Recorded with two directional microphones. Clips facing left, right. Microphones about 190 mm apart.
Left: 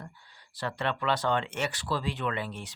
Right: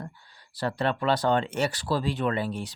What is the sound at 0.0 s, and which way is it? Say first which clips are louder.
Speech: right 6 dB; 35° right (ahead or behind).